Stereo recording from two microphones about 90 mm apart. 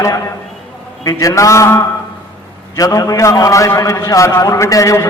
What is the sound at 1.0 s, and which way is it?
A man's voice, 40° left (ahead or behind).